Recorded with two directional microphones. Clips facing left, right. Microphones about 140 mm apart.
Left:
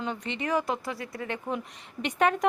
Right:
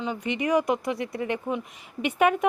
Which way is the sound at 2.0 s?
10° right (ahead or behind).